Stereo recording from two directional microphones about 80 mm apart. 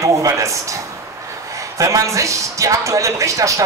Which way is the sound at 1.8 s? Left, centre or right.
Right.